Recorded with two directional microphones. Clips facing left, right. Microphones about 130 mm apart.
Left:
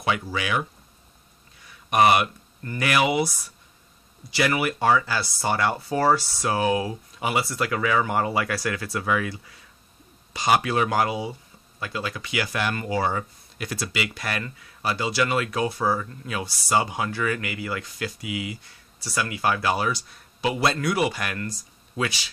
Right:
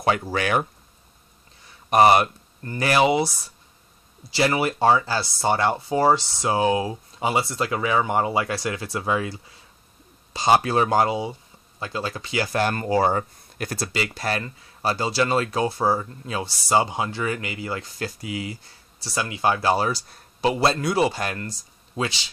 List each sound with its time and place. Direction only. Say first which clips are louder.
0.0 s speech: right 4 dB; 40° right (ahead or behind)
1.7 s speech: right 3 dB; 35° right (ahead or behind)